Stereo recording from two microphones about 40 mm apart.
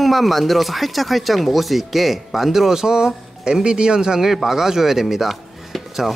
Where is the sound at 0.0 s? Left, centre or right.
Centre.